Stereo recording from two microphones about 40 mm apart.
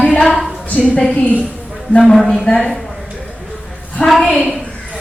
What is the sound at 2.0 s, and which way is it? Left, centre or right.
Speech, centre.